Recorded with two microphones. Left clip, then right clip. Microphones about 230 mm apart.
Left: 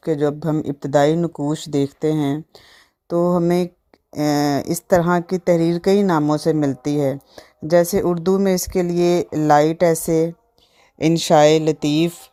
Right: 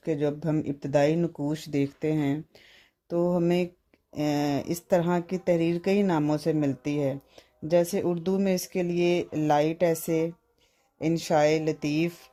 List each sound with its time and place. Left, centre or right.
0.2 s a woman's voice: left